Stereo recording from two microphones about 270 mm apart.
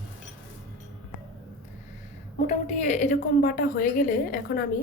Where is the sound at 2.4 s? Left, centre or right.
Left.